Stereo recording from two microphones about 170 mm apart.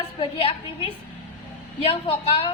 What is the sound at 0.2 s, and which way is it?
A woman's voice, 35° left (ahead or behind).